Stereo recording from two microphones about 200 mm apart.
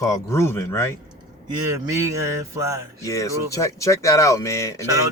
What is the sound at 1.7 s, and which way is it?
Speech, 15° right (ahead or behind).